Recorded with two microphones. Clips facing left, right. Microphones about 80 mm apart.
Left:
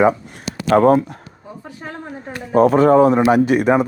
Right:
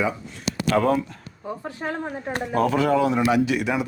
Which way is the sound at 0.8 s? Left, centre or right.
Left.